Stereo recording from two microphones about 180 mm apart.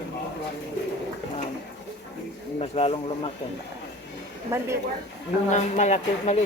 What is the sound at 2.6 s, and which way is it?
Speech, 35° left (ahead or behind).